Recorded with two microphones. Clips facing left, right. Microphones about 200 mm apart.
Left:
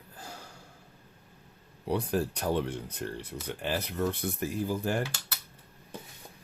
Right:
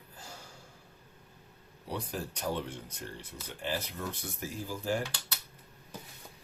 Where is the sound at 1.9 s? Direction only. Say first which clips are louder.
Left 8 dB; 60° left (ahead or behind).